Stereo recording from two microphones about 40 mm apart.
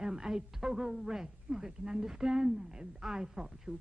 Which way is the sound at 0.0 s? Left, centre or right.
Centre.